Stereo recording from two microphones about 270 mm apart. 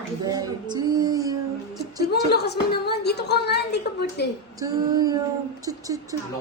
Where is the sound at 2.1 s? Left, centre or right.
Left.